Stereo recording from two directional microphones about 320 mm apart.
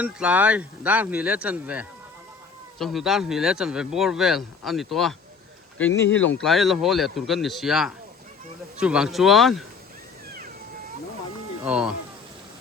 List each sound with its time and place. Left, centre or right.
0.0 s speech: centre
6.1 s speech: left
6.4 s speech: centre
11.6 s speech: centre